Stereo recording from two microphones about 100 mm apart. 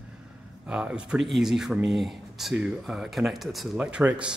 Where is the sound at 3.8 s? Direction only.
10° right (ahead or behind).